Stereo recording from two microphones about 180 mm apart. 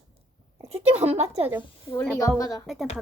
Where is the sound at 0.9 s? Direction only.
10° right (ahead or behind).